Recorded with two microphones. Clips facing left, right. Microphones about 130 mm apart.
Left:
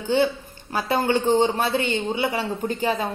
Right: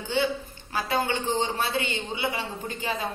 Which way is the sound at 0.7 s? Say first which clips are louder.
Left 5 dB; 45° left (ahead or behind).